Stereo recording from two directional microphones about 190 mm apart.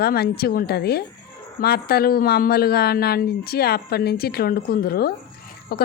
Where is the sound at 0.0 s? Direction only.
55° left (ahead or behind).